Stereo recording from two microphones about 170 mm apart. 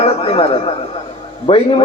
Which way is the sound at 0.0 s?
35° left (ahead or behind).